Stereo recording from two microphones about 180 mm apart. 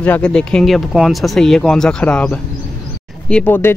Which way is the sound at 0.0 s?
5° left (ahead or behind).